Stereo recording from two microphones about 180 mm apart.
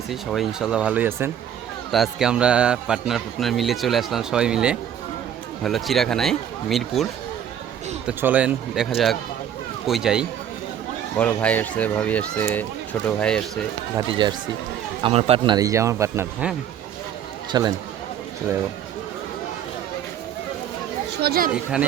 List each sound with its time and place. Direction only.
0.1 s a man's voice: centre (ahead or behind)
11.2 s a man's voice: 10° left (ahead or behind)
13.9 s speech: 25° right (ahead or behind)
15.5 s speech: 20° right (ahead or behind)
17.5 s speech: 20° right (ahead or behind)
21.2 s speech: 60° right (ahead or behind)
21.5 s a man's voice: 5° right (ahead or behind)